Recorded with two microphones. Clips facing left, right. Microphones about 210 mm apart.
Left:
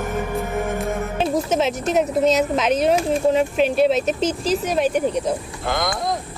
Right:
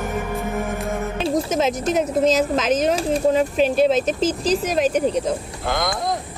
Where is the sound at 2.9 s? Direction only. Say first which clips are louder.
Left 1 dB; 35° right (ahead or behind).